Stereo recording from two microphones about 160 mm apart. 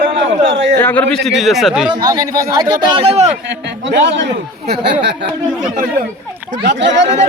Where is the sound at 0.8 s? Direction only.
10° left (ahead or behind).